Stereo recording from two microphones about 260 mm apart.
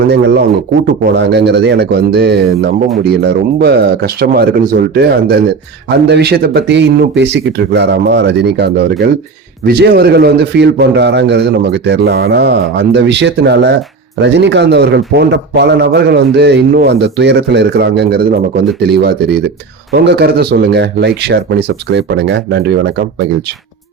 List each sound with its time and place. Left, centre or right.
0.0 s a man's voice: right